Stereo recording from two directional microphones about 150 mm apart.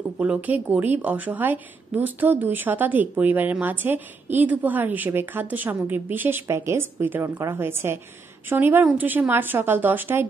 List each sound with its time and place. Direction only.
0.2 s a woman's voice: 10° right (ahead or behind)